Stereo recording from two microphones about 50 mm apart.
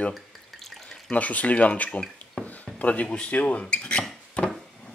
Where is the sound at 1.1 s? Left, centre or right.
Left.